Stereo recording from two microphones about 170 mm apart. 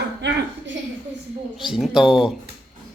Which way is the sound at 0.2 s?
90° right.